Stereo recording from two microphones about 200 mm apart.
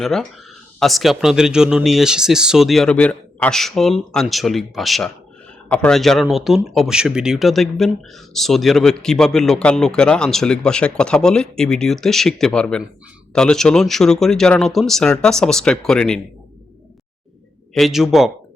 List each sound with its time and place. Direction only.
0.0 s speech: centre (ahead or behind)
17.7 s speech: centre (ahead or behind)